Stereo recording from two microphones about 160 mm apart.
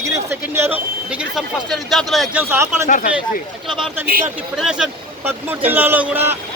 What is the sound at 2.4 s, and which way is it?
Speech, 15° right (ahead or behind).